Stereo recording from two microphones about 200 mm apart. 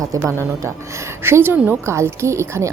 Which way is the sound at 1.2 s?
10° right (ahead or behind).